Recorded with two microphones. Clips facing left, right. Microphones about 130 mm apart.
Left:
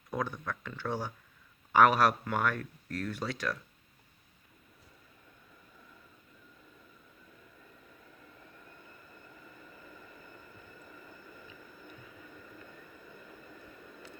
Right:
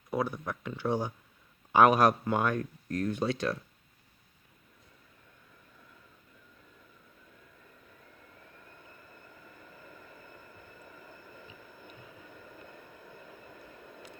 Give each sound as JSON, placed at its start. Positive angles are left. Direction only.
{"t": 0.1, "sound": "speech", "side_deg": -10}
{"t": 10.9, "sound": "vehicle", "side_deg": -10}